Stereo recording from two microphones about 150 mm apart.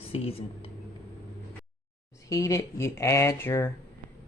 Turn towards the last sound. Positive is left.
turn(degrees=15)  # may be behind; listen again after turning